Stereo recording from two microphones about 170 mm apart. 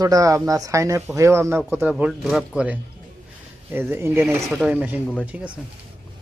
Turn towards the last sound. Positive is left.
turn(degrees=-5)  # may be behind; listen again after turning